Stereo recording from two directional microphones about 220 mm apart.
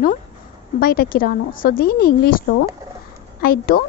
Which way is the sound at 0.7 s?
40° left (ahead or behind).